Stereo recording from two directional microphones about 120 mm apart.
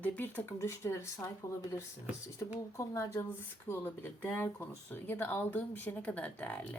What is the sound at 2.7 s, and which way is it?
A woman's voice, 25° left (ahead or behind).